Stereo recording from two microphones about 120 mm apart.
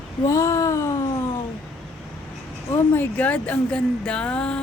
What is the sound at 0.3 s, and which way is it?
Speech, 25° left (ahead or behind).